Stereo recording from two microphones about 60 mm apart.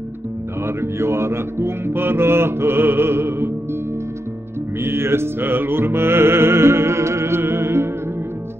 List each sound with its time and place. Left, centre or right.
0.7 s music: right
4.8 s music: right